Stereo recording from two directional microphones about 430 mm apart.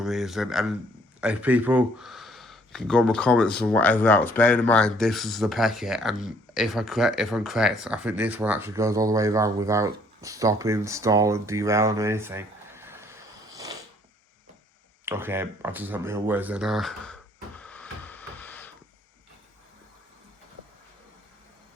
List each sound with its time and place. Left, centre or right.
0.0 s speech: centre
15.0 s speech: centre
17.6 s music: centre